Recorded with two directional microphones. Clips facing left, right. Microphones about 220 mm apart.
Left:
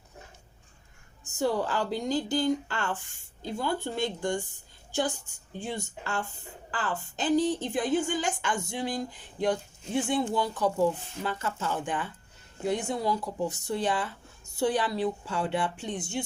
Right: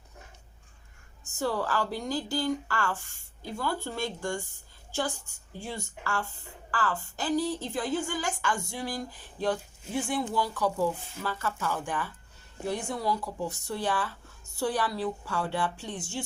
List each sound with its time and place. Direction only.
1.4 s a woman's voice: 20° left (ahead or behind)